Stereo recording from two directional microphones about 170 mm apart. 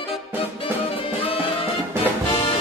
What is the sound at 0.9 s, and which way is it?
Music, 35° left (ahead or behind).